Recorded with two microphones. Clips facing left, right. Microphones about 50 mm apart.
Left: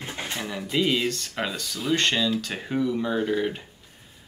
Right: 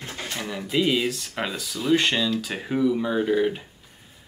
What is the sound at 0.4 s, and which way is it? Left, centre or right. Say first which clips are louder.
Speech: right 2 dB; centre.